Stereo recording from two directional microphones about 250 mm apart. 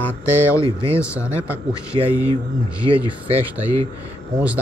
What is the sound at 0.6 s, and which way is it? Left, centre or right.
Speech, right.